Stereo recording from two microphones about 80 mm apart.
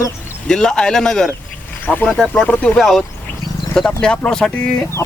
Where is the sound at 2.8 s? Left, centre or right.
Centre.